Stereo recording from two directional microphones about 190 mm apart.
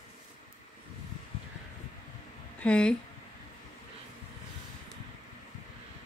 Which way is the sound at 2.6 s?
5° left (ahead or behind).